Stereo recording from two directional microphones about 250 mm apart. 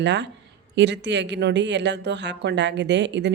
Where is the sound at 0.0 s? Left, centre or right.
Right.